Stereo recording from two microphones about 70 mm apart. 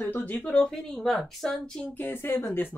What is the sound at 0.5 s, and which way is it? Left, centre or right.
Speech, centre.